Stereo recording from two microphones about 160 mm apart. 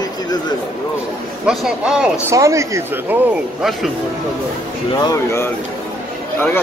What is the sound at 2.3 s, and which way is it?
Speech, 20° right (ahead or behind).